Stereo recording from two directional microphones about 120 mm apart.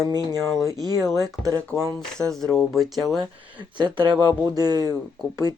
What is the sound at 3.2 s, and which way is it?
Speech, 40° right (ahead or behind).